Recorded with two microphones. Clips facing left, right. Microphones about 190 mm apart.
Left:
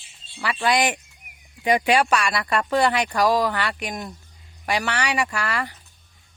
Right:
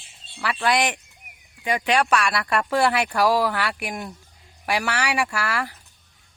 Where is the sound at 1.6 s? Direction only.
20° left (ahead or behind).